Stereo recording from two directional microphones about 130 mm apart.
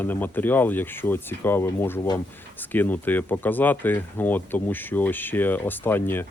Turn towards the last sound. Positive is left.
turn(degrees=15)  # may be behind; listen again after turning